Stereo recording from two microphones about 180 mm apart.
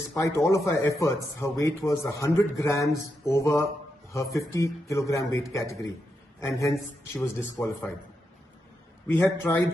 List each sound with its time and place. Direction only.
0.2 s a man's voice: 15° left (ahead or behind)
9.0 s a man's voice: 10° left (ahead or behind)